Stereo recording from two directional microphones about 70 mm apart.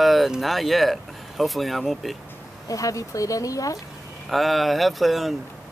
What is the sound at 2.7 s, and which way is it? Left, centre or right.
Speech, left.